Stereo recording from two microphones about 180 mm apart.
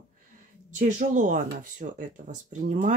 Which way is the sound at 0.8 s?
45° right (ahead or behind).